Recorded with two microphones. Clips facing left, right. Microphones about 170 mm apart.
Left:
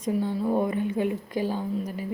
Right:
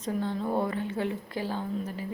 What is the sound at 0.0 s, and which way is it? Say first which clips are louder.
A woman's voice: left 4 dB; 10° left (ahead or behind).